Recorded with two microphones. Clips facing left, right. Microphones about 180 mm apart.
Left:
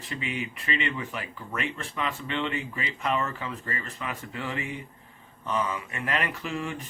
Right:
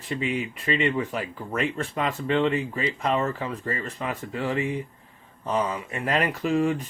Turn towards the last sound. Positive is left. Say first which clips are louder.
# right 9 dB
turn(degrees=-40)  # may be behind; listen again after turning